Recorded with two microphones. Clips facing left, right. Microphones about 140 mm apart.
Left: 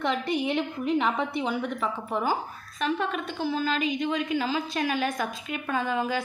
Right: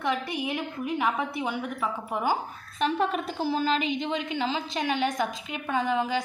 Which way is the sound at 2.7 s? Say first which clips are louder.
Right 2 dB; 30° right (ahead or behind).